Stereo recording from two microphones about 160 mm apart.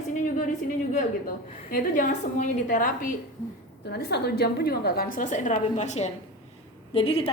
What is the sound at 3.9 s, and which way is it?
A woman's voice, 85° left.